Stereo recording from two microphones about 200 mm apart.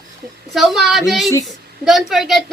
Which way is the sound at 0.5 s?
Centre (ahead or behind).